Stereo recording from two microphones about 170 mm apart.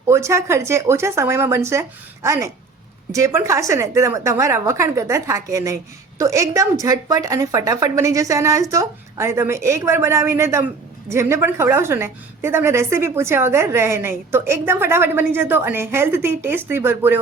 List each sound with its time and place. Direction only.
0.1 s a woman's voice: 15° right (ahead or behind)